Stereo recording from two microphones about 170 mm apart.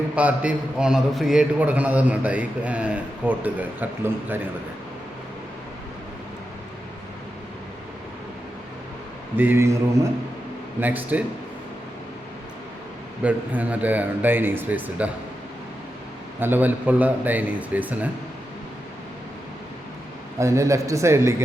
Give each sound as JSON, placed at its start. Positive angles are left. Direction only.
{"t": 0.2, "sound": "a man's voice", "side_deg": -10}
{"t": 9.3, "sound": "a man's voice", "side_deg": -15}
{"t": 10.8, "sound": "a man's voice", "side_deg": -10}
{"t": 13.2, "sound": "a man's voice", "side_deg": -10}
{"t": 16.4, "sound": "a man's voice", "side_deg": -10}
{"t": 20.4, "sound": "a man's voice", "side_deg": -15}